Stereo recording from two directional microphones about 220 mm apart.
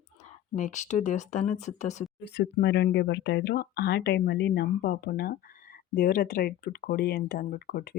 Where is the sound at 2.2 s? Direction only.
50° left (ahead or behind).